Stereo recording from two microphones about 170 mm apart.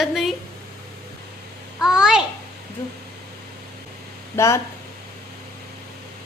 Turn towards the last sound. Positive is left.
turn(degrees=15)  # may be behind; listen again after turning